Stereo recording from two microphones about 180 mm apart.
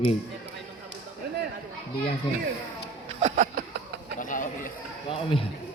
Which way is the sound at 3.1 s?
35° right (ahead or behind).